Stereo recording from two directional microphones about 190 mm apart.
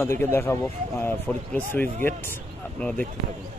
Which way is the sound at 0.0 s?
10° left (ahead or behind).